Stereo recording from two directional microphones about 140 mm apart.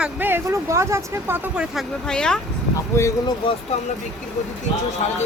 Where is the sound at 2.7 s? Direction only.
25° left (ahead or behind).